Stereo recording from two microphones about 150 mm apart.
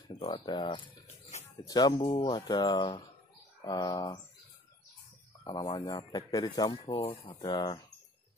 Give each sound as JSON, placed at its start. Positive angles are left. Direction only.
{"t": 0.2, "sound": "speech", "side_deg": 35}
{"t": 5.4, "sound": "speech", "side_deg": 30}